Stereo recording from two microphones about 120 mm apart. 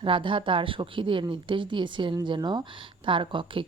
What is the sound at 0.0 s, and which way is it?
Speech, 45° right (ahead or behind).